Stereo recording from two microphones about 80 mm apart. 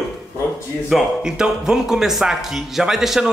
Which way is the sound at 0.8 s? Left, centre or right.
Centre.